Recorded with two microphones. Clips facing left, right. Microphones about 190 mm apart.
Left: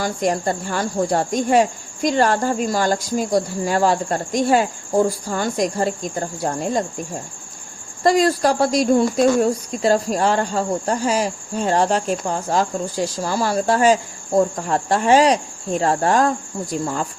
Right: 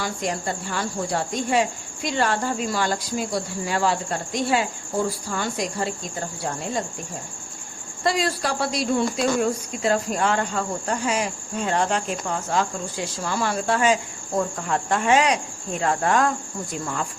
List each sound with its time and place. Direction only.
0.0 s speech: 45° left (ahead or behind)
8.0 s speech: 45° left (ahead or behind)